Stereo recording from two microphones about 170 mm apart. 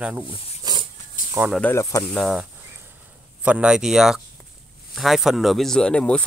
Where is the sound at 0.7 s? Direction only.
25° right (ahead or behind).